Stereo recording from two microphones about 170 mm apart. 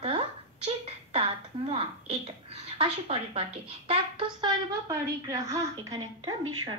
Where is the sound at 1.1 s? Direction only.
35° right (ahead or behind).